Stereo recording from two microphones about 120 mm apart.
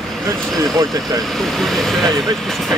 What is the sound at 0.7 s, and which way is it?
Speech, 30° right (ahead or behind).